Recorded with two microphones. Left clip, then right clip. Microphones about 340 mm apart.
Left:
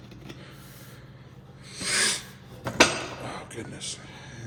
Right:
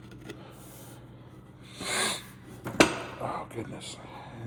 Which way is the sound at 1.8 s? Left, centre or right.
Centre.